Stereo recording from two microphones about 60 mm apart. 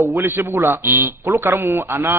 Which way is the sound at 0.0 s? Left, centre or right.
Right.